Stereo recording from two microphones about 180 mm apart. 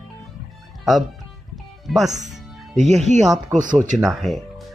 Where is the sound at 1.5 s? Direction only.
Centre (ahead or behind).